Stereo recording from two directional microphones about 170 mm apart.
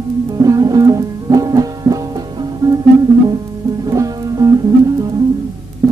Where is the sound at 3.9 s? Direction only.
20° right (ahead or behind).